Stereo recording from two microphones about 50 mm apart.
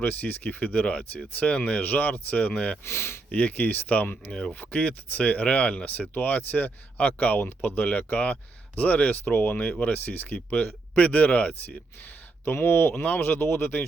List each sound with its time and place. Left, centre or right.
0.0 s speech: left
2.8 s speech: left
3.3 s speech: left
4.3 s speech: centre
4.6 s speech: left
12.5 s speech: left